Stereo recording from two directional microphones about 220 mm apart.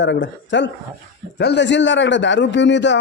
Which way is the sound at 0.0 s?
55° left (ahead or behind).